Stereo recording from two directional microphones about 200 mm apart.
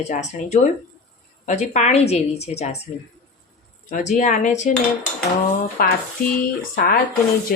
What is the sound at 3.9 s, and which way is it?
Speech, 35° left (ahead or behind).